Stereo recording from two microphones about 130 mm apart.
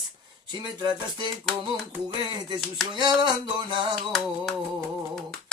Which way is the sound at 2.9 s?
35° right (ahead or behind).